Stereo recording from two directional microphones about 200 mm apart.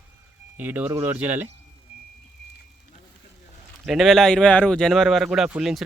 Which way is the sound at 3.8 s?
Centre (ahead or behind).